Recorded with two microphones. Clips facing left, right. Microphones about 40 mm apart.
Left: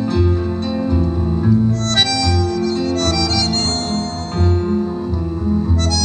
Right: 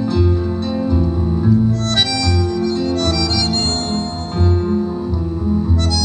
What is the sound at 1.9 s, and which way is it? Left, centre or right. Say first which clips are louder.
Harmonica: left 1 dB; left.